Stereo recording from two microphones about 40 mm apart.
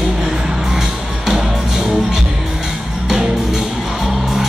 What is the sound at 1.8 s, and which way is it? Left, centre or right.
Music, centre.